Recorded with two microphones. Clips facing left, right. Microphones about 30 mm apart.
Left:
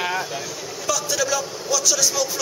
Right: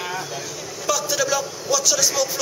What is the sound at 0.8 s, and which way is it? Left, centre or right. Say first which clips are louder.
Music: right 1 dB; centre.